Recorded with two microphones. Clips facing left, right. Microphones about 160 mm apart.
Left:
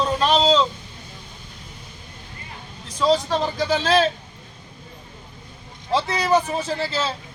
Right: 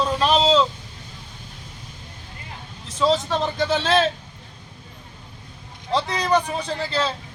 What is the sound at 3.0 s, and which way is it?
Speech, centre (ahead or behind).